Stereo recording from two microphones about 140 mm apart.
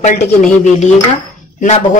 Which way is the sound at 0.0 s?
60° left (ahead or behind).